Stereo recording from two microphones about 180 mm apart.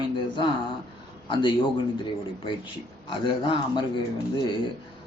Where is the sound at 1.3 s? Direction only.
25° left (ahead or behind).